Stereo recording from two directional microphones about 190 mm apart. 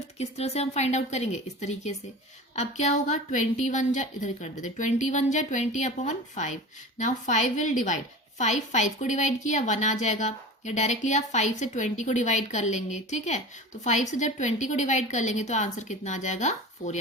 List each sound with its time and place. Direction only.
0.2 s a woman's voice: 35° left (ahead or behind)